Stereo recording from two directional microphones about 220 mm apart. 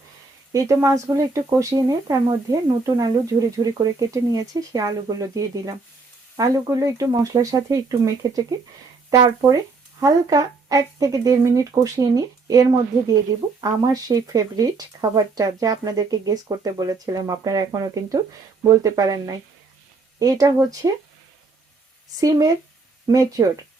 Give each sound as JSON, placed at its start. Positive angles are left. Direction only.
{"t": 0.5, "sound": "speech", "side_deg": -15}
{"t": 22.2, "sound": "speech", "side_deg": -15}